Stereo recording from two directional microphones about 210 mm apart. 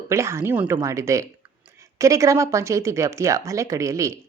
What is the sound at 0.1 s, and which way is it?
A woman's voice, 15° right (ahead or behind).